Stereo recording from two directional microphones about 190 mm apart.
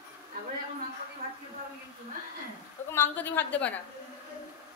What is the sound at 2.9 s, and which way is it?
Speech, 10° left (ahead or behind).